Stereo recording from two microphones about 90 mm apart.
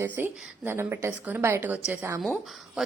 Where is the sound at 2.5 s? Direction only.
Centre (ahead or behind).